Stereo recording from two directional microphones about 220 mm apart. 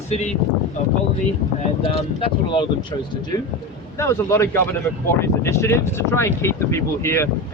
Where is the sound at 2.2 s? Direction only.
25° left (ahead or behind).